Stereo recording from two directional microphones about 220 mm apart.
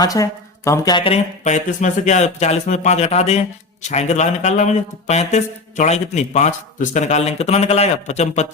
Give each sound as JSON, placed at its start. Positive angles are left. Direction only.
{"t": 0.0, "sound": "speech", "side_deg": 15}